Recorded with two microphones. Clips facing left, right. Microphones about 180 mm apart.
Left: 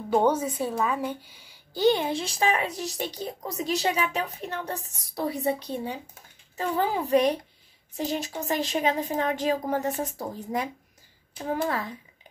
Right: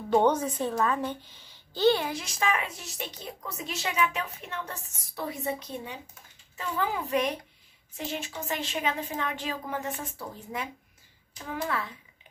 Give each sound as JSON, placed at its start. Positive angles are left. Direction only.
{"t": 0.1, "sound": "a woman's voice", "side_deg": 10}